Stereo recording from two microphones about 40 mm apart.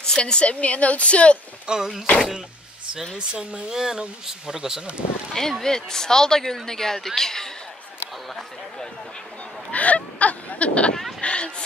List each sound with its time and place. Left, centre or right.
0.0 s a woman's voice: centre
1.7 s speech: right
3.2 s speech: right
5.3 s speech: centre
9.7 s fowl: left
11.1 s vehicle: left